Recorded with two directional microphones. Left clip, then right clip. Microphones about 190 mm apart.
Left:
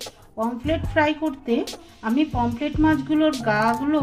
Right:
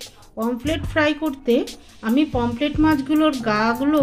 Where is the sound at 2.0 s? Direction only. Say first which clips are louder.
Right 2 dB; 40° right (ahead or behind).